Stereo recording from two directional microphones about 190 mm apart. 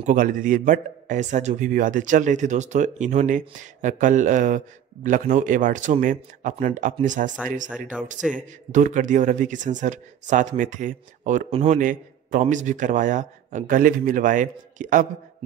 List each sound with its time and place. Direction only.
0.0 s a man's voice: 45° right (ahead or behind)